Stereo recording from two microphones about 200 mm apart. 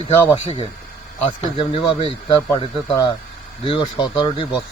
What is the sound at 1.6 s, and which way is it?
Speech, 25° left (ahead or behind).